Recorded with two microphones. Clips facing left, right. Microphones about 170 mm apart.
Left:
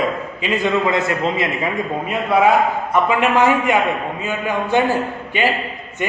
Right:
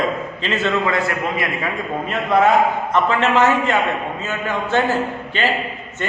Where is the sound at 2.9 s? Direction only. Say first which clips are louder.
Left 3 dB; 10° left (ahead or behind).